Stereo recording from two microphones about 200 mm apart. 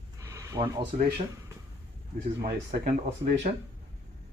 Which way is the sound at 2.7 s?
45° right (ahead or behind).